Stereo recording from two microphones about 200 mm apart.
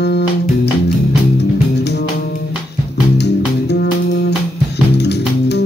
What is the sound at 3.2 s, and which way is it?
Music, 55° left (ahead or behind).